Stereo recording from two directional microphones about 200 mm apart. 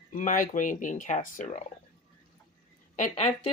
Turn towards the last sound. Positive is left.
turn(degrees=35)  # may be behind; listen again after turning